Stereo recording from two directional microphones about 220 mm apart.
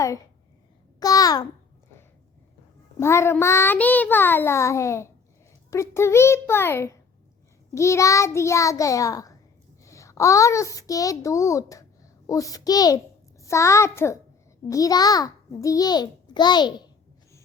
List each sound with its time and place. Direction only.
0.9 s babbling: 15° left (ahead or behind)
3.0 s child singing: 10° left (ahead or behind)
9.8 s a child's voice: 15° left (ahead or behind)
12.3 s child singing: 15° left (ahead or behind)